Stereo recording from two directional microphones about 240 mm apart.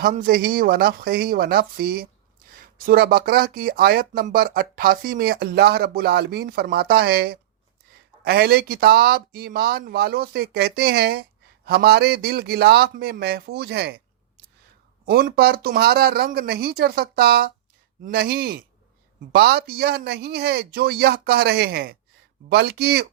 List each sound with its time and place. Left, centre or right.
0.0 s speech: right
15.0 s speech: right